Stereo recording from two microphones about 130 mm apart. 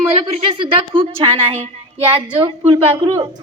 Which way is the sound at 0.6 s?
40° right (ahead or behind).